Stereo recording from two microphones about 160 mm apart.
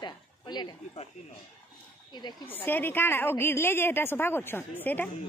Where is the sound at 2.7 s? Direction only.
10° left (ahead or behind).